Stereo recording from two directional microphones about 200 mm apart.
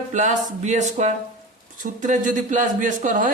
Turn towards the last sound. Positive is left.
turn(degrees=-40)  # may be behind; listen again after turning